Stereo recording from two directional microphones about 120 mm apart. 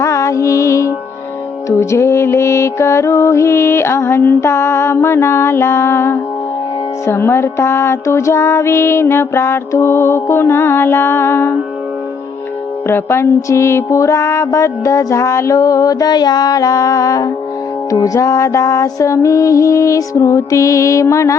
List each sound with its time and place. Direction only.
0.0 s music: 25° left (ahead or behind)
12.9 s music: 20° left (ahead or behind)